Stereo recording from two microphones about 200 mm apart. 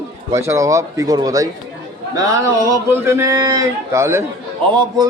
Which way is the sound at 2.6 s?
15° right (ahead or behind).